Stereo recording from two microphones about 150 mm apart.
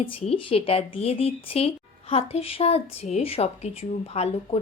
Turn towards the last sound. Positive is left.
turn(degrees=45)  # may be behind; listen again after turning